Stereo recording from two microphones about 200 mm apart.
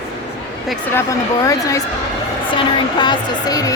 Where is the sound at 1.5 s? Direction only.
15° left (ahead or behind).